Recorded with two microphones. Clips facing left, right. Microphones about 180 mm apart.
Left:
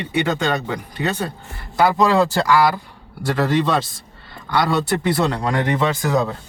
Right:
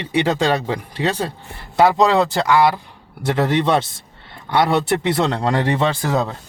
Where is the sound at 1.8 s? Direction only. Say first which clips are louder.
Right 1 dB; 25° right (ahead or behind).